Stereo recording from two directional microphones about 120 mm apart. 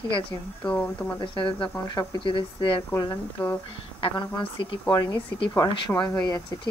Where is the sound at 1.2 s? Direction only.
45° left (ahead or behind).